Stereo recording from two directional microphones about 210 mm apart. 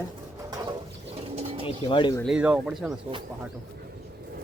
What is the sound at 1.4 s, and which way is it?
Bird, 30° right (ahead or behind).